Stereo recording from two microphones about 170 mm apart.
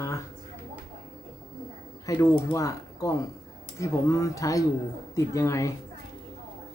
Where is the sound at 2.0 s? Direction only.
20° left (ahead or behind).